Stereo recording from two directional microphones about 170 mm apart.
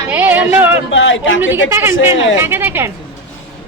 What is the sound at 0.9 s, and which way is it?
Speech, 90° left.